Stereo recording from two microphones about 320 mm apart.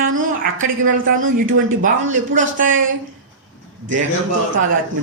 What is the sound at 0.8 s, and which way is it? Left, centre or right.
A man's voice, right.